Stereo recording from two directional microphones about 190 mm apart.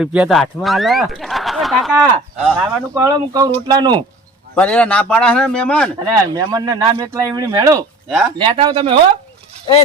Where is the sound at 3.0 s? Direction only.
20° right (ahead or behind).